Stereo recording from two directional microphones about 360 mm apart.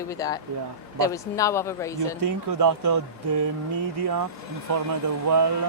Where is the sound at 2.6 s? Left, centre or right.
Right.